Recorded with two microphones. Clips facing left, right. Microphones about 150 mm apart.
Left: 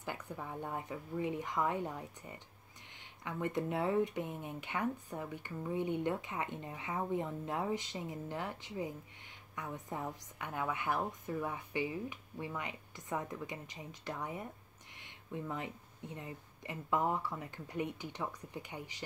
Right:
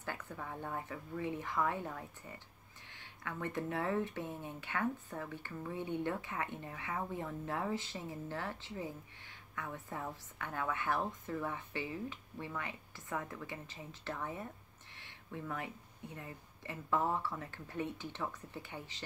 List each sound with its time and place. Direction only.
0.0 s speech: 15° left (ahead or behind)